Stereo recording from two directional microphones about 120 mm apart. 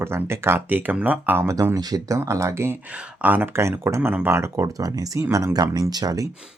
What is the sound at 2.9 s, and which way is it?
Speech, 10° right (ahead or behind).